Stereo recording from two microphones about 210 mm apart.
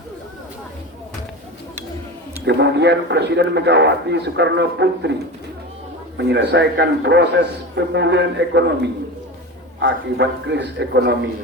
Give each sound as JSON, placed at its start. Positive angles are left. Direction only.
{"t": 2.5, "sound": "a man's voice", "side_deg": -55}
{"t": 6.1, "sound": "a man's voice", "side_deg": -55}